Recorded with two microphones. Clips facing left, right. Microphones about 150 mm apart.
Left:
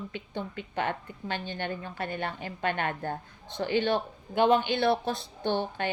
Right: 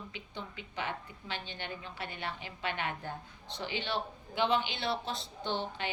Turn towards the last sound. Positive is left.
turn(degrees=55)  # may be behind; listen again after turning